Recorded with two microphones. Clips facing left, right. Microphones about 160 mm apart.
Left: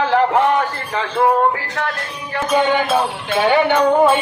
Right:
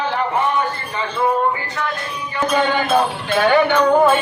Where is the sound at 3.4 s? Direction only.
25° left (ahead or behind).